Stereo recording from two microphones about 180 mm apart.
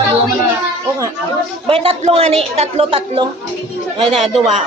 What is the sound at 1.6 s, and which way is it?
A woman's voice, 30° right (ahead or behind).